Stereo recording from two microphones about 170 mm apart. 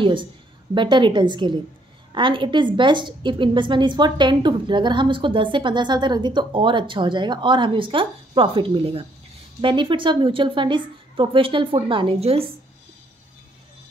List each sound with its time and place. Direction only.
0.0 s a woman's voice: 30° right (ahead or behind)